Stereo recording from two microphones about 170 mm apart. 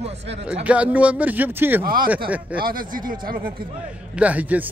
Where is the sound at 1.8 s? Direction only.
55° right (ahead or behind).